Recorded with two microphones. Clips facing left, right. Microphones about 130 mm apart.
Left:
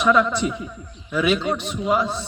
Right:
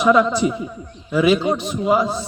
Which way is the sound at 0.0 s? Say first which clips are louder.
Right 3 dB; 25° right (ahead or behind).